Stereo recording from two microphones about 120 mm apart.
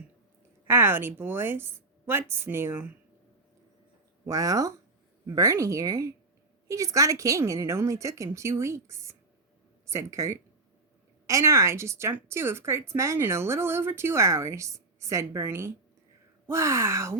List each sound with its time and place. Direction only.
0.7 s a woman's voice: 20° right (ahead or behind)
4.3 s a woman's voice: 30° right (ahead or behind)